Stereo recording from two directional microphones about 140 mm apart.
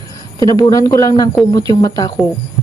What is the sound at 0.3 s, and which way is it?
Speech, 25° left (ahead or behind).